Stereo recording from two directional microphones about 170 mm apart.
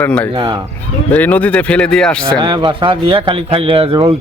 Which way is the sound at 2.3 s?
25° right (ahead or behind).